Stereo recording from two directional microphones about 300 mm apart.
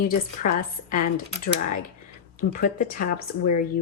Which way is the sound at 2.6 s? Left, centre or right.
Left.